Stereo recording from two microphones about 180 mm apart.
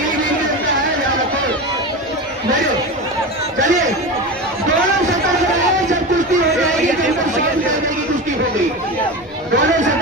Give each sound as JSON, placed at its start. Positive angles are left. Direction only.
{"t": 3.6, "sound": "chatter", "side_deg": -45}